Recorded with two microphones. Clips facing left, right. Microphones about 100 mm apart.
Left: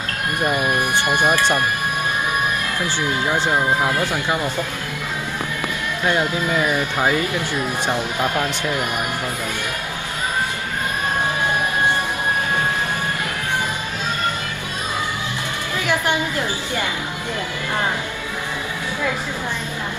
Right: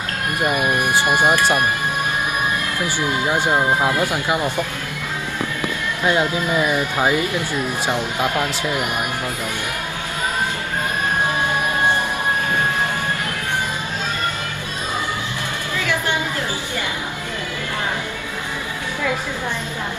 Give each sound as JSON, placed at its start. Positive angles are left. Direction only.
{"t": 0.4, "sound": "speech", "side_deg": -20}
{"t": 3.3, "sound": "speech", "side_deg": -15}
{"t": 6.0, "sound": "speech", "side_deg": -15}
{"t": 15.8, "sound": "a sound", "side_deg": 15}